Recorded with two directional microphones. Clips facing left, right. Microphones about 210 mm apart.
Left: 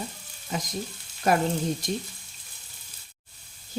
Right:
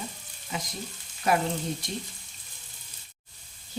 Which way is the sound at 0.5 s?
40° left (ahead or behind).